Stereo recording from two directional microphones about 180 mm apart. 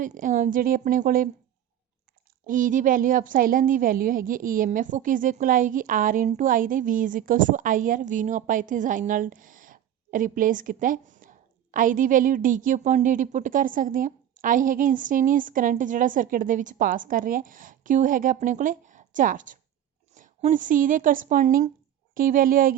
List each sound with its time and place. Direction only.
0.0 s a woman's voice: 45° right (ahead or behind)
2.5 s a woman's voice: 45° right (ahead or behind)